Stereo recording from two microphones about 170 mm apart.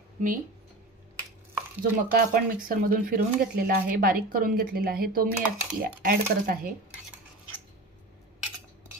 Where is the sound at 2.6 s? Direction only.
60° right (ahead or behind).